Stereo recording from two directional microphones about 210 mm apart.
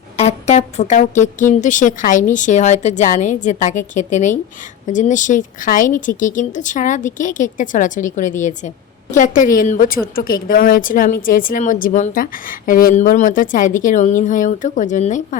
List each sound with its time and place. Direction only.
0.2 s a woman's voice: 30° left (ahead or behind)